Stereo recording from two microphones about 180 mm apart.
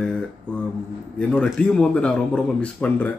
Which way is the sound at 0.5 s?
5° left (ahead or behind).